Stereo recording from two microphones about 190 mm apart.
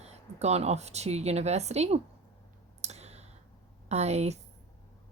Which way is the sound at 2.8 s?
35° right (ahead or behind).